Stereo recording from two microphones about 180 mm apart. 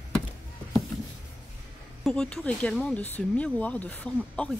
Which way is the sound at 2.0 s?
5° left (ahead or behind).